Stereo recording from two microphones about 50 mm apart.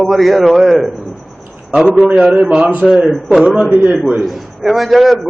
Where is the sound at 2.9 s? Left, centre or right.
Centre.